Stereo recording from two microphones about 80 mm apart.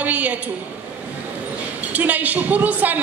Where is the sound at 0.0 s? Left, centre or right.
Centre.